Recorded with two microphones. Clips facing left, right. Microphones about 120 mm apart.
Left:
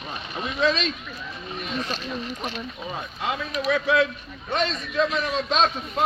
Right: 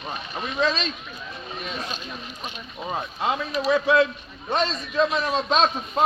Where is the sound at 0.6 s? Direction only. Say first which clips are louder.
Left 1 dB; 35° right (ahead or behind).